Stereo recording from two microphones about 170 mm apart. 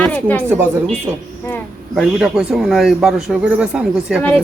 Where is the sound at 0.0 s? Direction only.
5° left (ahead or behind).